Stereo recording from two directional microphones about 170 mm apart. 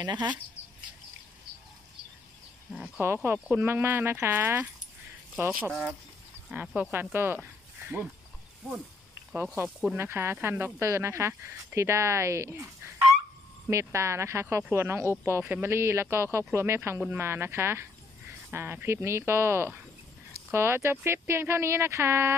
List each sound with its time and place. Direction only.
0.0 s speech: 25° right (ahead or behind)
0.6 s bird: 15° left (ahead or behind)
2.7 s speech: 10° right (ahead or behind)
5.7 s speech: 5° right (ahead or behind)
9.9 s speech: 15° right (ahead or behind)
13.7 s speech: 15° right (ahead or behind)